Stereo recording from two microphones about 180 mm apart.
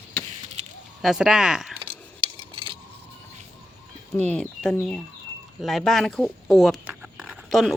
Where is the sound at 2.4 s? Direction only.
30° right (ahead or behind).